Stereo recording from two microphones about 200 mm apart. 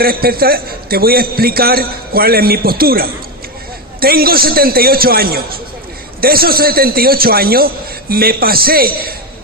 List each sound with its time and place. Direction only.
0.0 s a man's voice: 50° right (ahead or behind)